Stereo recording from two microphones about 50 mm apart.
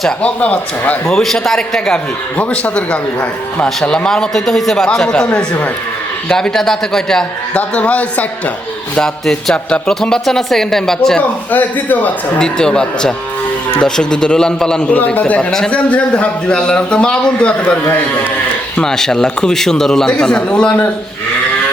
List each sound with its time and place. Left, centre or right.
0.2 s a man's voice: left
1.0 s a man's voice: centre
2.4 s a man's voice: left; by 4.9 s centre
5.0 s a man's voice: centre
7.5 s a man's voice: left
9.0 s a man's voice: centre
12.4 s a man's voice: centre
14.8 s a man's voice: left
18.8 s a man's voice: centre